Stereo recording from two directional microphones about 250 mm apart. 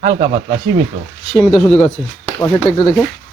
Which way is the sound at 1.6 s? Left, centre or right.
Centre.